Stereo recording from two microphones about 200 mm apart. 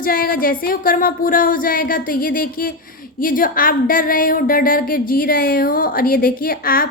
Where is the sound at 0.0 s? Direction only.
45° left (ahead or behind).